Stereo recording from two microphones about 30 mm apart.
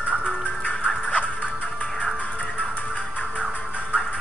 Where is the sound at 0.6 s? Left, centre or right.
Left.